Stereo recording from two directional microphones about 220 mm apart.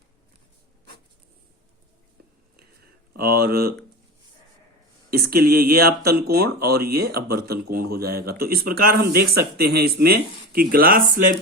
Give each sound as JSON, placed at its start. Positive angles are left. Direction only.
{"t": 3.2, "sound": "speech", "side_deg": -45}
{"t": 5.1, "sound": "speech", "side_deg": -45}